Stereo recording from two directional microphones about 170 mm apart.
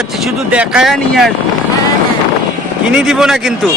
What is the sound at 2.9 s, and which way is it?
Speech, centre (ahead or behind).